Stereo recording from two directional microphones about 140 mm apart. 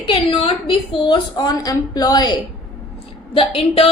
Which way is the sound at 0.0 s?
35° left (ahead or behind).